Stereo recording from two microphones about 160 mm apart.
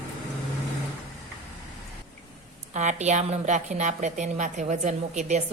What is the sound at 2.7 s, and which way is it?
A woman's voice, 45° right (ahead or behind).